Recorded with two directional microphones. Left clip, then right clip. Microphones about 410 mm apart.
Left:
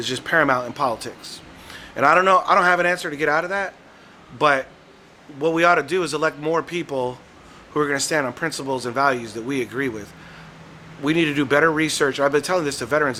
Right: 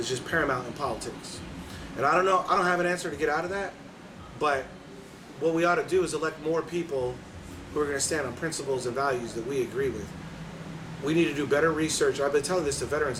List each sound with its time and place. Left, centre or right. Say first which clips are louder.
0.0 s a man's voice: left 8 dB; left
7.8 s a man's voice: left 7 dB; left
11.0 s a man's voice: left 6 dB; left